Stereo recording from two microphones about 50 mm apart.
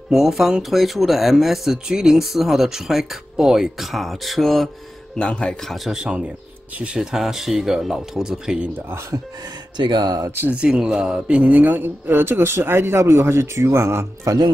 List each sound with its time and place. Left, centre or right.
0.1 s speech: centre
5.1 s speech: centre
5.9 s speech: centre
10.5 s a man's voice: centre; by 14.3 s right